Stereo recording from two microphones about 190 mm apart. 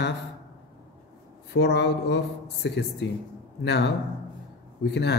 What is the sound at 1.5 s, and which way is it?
A man's voice, 60° left (ahead or behind).